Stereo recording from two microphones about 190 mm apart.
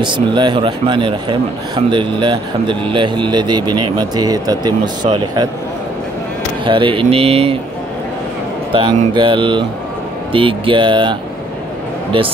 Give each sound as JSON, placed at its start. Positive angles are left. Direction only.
{"t": 0.0, "sound": "a man's voice", "side_deg": -25}
{"t": 6.6, "sound": "a man's voice", "side_deg": -25}
{"t": 8.7, "sound": "a man's voice", "side_deg": -25}